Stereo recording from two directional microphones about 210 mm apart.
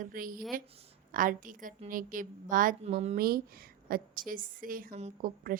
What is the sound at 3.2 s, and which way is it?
A woman's voice, 45° right (ahead or behind).